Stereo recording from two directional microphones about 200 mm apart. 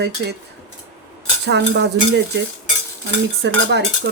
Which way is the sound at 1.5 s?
60° right (ahead or behind).